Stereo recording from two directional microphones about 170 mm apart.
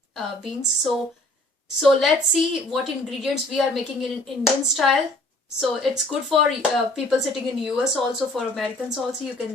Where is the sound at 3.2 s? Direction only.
Centre (ahead or behind).